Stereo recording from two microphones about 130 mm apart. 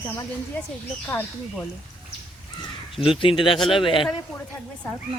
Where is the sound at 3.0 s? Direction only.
45° left (ahead or behind).